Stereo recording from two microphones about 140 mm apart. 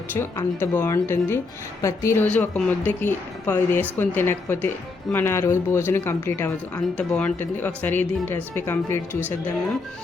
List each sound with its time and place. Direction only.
0.2 s speech: 15° left (ahead or behind)